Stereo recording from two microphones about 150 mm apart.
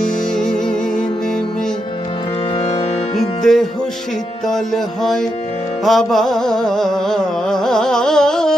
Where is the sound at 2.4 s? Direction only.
40° left (ahead or behind).